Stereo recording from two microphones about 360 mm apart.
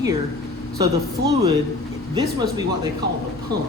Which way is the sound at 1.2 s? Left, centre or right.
Right.